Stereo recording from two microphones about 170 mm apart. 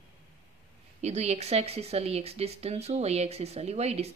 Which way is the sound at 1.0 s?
40° right (ahead or behind).